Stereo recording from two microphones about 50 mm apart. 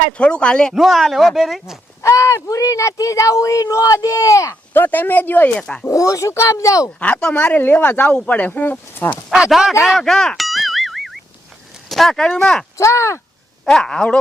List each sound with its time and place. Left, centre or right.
0.2 s speech: left
0.7 s speech: centre
2.0 s speech: left
4.7 s speech: left
5.5 s speech: left
5.9 s speech: left
7.0 s speech: left
7.3 s speech: left
9.5 s a man's voice: centre
10.0 s boing: centre
11.9 s a sound: centre
12.1 s speech: centre
12.7 s speech: left
13.7 s speech: centre